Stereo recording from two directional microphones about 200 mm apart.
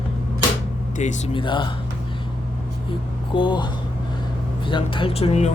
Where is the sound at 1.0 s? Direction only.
35° left (ahead or behind).